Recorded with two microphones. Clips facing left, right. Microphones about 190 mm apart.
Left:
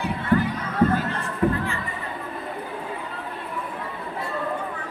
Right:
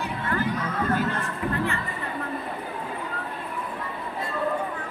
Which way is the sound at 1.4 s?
50° left (ahead or behind).